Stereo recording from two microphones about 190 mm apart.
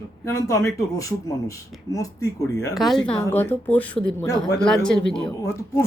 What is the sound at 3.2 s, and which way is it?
Speech, 10° left (ahead or behind).